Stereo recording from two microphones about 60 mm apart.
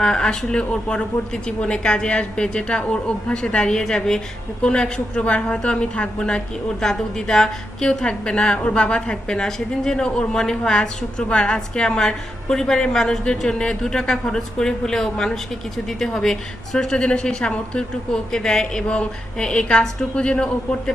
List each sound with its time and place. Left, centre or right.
0.0 s a woman's voice: centre